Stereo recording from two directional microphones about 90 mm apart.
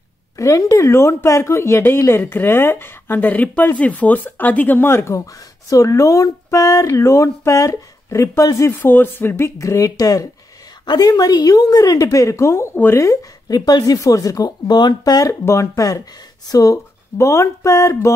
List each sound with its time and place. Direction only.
0.4 s speech: 40° left (ahead or behind)
13.0 s speech: 40° left (ahead or behind)
15.4 s speech: 35° left (ahead or behind)